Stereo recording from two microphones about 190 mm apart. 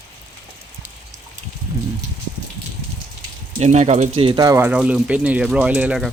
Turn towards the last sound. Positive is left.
turn(degrees=-5)  # may be behind; listen again after turning